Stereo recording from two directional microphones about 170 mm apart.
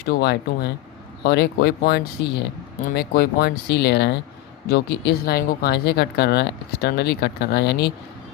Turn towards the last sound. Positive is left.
turn(degrees=75)  # may be behind; listen again after turning